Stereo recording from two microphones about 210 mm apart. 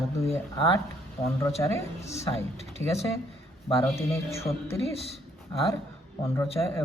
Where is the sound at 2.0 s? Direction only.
30° left (ahead or behind).